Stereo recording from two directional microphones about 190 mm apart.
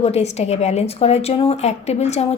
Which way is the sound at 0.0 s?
35° left (ahead or behind).